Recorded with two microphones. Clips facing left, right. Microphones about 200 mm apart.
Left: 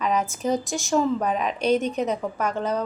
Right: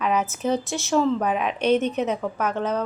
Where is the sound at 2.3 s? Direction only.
5° right (ahead or behind).